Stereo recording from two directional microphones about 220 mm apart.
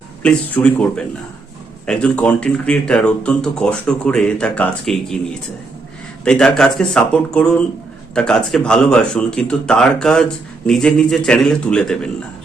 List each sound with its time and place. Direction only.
0.2 s speech: 5° left (ahead or behind)
6.2 s speech: 5° left (ahead or behind)